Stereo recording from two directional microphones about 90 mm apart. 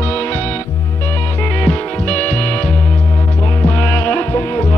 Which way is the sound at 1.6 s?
15° left (ahead or behind).